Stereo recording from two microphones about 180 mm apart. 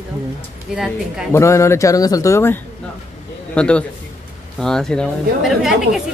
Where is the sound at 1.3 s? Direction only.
15° left (ahead or behind).